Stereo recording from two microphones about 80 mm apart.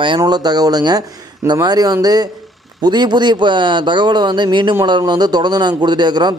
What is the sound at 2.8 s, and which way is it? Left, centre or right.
Speech, right.